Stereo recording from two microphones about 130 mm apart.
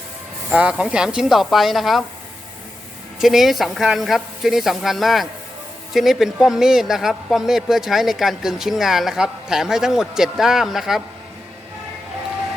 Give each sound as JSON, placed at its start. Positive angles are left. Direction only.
{"t": 0.5, "sound": "a man's voice", "side_deg": -10}
{"t": 3.2, "sound": "a man's voice", "side_deg": 0}